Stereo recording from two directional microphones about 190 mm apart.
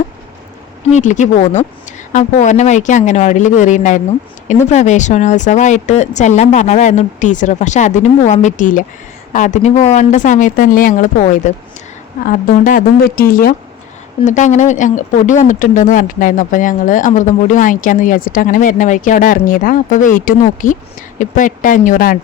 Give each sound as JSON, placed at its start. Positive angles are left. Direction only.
{"t": 0.9, "sound": "speech", "side_deg": 40}
{"t": 14.3, "sound": "speech", "side_deg": 40}